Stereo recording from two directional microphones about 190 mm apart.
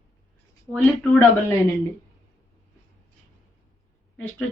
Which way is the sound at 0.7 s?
Centre (ahead or behind).